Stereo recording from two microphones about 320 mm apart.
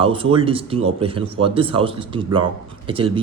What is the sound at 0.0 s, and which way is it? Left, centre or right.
Speech, centre.